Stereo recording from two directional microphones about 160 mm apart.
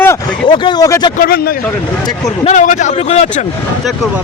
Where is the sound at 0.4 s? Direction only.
30° left (ahead or behind).